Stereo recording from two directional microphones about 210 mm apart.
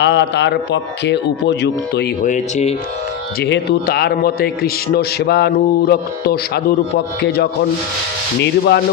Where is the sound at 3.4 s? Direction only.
50° left (ahead or behind).